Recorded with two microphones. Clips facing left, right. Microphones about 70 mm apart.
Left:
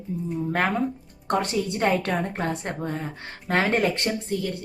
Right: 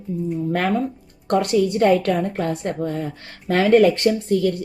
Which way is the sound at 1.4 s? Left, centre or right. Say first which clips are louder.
Right 9 dB; left.